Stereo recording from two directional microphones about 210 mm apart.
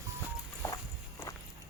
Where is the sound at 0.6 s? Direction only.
15° left (ahead or behind).